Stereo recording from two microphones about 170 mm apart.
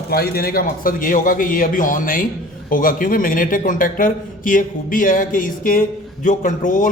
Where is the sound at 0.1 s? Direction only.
65° left (ahead or behind).